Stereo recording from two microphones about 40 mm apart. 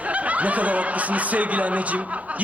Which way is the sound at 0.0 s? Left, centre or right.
Right.